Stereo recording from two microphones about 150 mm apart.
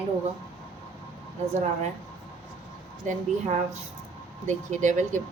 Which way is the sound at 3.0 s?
55° right (ahead or behind).